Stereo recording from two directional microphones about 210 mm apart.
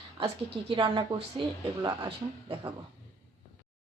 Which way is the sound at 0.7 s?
25° right (ahead or behind).